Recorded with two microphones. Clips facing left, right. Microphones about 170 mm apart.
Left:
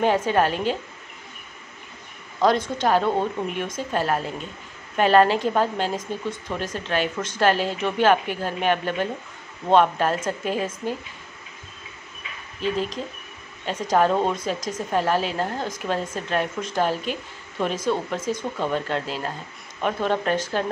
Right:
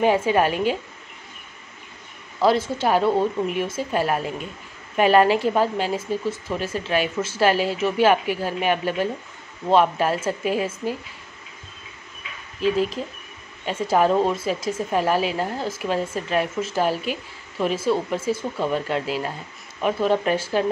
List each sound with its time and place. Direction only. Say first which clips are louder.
0.0 s a woman's voice: right 1 dB; 10° right (ahead or behind)
2.4 s a woman's voice: right 1 dB; 5° right (ahead or behind)
12.7 s a woman's voice: right 4 dB; 5° right (ahead or behind)